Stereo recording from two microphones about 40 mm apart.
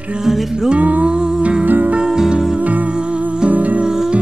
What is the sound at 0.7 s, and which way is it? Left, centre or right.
Music, right.